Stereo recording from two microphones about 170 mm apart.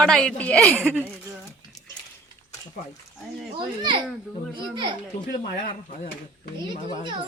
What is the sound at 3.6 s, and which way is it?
A child's voice, 25° right (ahead or behind).